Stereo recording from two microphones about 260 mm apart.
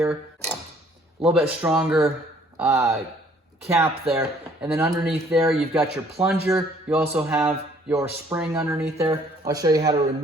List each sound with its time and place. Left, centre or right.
1.2 s speech: centre